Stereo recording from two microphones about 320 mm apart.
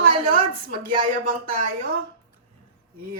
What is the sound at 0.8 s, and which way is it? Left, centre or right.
Speech, right.